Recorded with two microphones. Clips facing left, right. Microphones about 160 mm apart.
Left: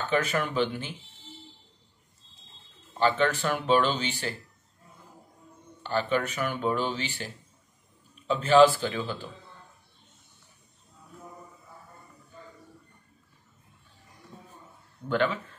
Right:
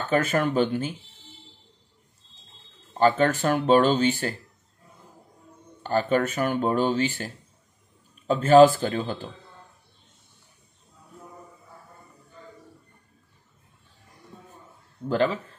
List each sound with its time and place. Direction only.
0.1 s speech: 45° right (ahead or behind)
3.0 s speech: 45° right (ahead or behind)
5.8 s speech: 45° right (ahead or behind)
15.0 s speech: 35° right (ahead or behind)